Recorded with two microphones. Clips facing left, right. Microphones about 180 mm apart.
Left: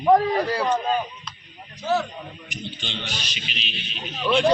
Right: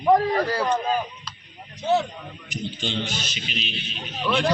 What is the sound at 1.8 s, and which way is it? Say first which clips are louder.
Speech: right 2 dB; 20° right (ahead or behind).